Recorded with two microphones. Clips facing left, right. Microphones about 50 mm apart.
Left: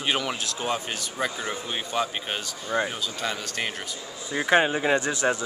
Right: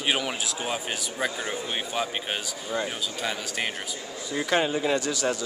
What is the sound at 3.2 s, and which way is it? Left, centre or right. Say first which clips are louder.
Speech: even; centre.